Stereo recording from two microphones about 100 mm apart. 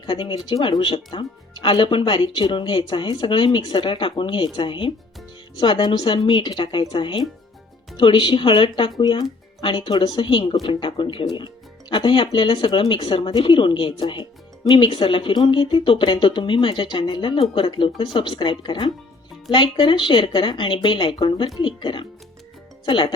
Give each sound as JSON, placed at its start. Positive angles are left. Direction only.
{"t": 0.0, "sound": "speech", "side_deg": 55}
{"t": 9.0, "sound": "speech", "side_deg": 45}
{"t": 9.6, "sound": "speech", "side_deg": 60}